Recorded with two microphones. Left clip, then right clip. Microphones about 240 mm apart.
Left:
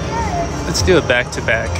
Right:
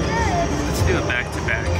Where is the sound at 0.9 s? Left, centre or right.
Centre.